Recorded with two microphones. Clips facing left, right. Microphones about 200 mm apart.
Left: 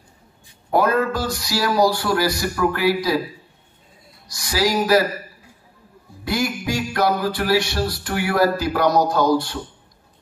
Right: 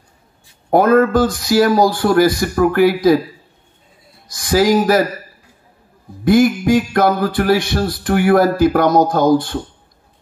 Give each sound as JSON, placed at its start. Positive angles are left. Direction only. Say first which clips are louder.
{"t": 0.7, "sound": "music", "louder": "right 7 dB", "side_deg": -50}
{"t": 4.3, "sound": "music", "louder": "right 8 dB", "side_deg": -50}
{"t": 6.2, "sound": "music", "louder": "right 11 dB", "side_deg": -50}